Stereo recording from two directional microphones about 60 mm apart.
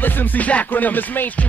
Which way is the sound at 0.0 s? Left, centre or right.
Left.